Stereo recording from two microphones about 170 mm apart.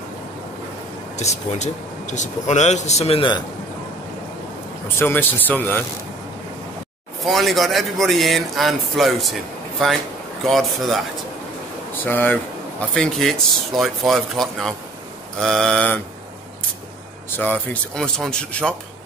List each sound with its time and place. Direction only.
1.1 s speech: 40° left (ahead or behind)
4.9 s speech: 10° left (ahead or behind)
7.2 s a man's voice: centre (ahead or behind)
11.9 s a man's voice: 10° left (ahead or behind)
17.4 s a man's voice: 5° left (ahead or behind)